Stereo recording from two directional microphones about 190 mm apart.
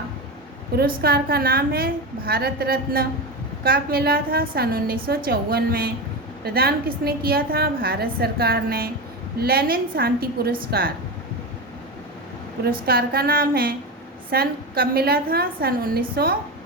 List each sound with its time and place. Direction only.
0.8 s a woman's voice: 55° right (ahead or behind)
12.6 s a woman's voice: 55° right (ahead or behind)